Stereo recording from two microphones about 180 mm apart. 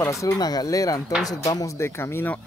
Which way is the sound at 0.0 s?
15° left (ahead or behind).